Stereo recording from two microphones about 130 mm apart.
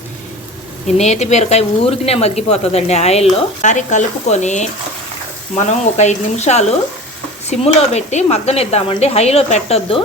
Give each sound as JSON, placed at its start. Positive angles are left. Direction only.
{"t": 0.9, "sound": "speech", "side_deg": 60}
{"t": 3.6, "sound": "speech", "side_deg": 70}